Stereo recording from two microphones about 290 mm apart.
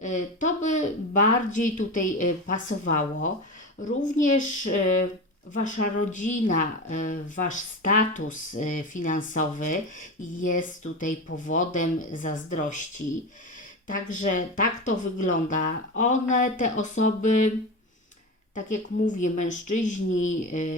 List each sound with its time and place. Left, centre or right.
0.0 s speech: left
14.1 s speech: left
18.5 s speech: left